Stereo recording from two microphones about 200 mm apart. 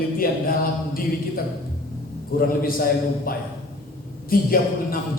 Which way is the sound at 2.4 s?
45° left (ahead or behind).